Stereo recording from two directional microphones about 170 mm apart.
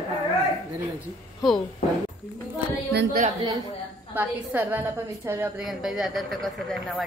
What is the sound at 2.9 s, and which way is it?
Speech, 70° right (ahead or behind).